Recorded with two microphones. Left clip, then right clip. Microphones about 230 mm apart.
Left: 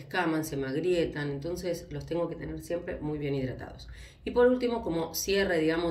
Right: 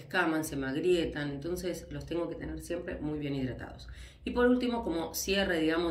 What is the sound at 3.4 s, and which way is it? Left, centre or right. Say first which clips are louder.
Speech: left 2 dB; right.